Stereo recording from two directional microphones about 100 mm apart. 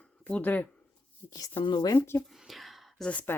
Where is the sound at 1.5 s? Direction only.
50° left (ahead or behind).